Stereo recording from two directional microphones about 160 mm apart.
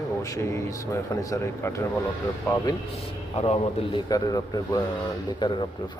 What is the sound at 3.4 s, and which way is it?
Speech, 40° left (ahead or behind).